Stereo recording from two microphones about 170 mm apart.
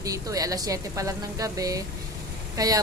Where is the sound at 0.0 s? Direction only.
20° right (ahead or behind).